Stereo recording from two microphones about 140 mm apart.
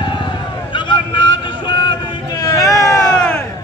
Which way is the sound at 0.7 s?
35° left (ahead or behind).